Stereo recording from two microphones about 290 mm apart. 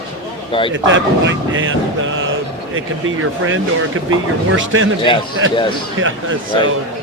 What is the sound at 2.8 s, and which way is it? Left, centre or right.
Speech, right.